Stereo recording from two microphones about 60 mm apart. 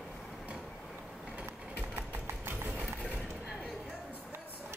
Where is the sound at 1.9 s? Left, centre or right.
Right.